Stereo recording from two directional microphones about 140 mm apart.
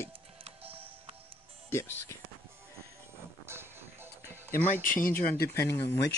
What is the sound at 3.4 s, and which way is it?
Music, 15° right (ahead or behind).